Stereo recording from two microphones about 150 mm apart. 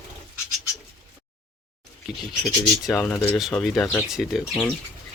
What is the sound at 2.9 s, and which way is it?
Speech, 10° left (ahead or behind).